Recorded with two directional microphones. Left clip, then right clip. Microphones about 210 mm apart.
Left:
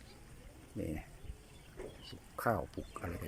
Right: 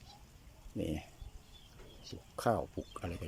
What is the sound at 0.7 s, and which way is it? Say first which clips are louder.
Speech: right 3 dB; 15° right (ahead or behind).